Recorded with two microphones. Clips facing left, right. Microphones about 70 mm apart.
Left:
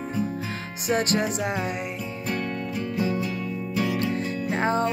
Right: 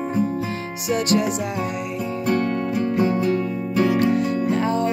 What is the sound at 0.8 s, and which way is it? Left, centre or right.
Music, left.